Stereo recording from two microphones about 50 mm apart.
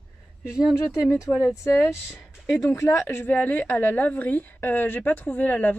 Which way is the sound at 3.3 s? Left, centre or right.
Left.